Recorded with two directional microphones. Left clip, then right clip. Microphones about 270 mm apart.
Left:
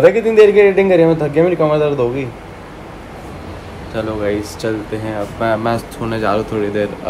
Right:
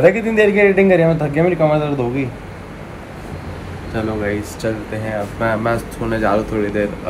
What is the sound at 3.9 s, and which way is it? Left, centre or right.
A man's voice, centre.